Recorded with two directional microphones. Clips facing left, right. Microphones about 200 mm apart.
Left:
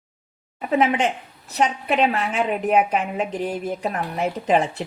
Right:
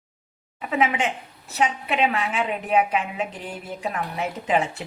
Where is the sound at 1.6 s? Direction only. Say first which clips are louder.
Left 3 dB; 40° left (ahead or behind).